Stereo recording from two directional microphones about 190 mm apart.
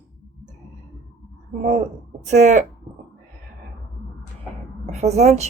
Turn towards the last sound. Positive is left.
turn(degrees=-35)  # may be behind; listen again after turning